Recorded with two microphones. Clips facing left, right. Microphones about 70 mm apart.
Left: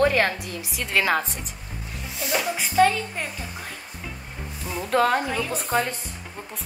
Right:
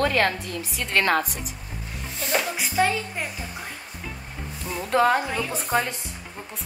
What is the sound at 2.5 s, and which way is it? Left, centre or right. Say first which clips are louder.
Speech: left 8 dB; centre.